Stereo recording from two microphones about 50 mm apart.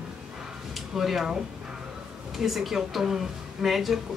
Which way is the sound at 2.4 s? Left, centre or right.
Centre.